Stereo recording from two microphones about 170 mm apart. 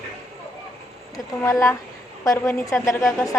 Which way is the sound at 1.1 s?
20° left (ahead or behind).